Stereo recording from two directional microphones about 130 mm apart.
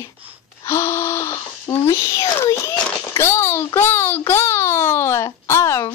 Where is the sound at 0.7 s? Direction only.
20° left (ahead or behind).